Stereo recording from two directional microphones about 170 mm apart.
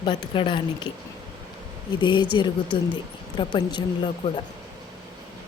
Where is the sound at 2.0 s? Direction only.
25° left (ahead or behind).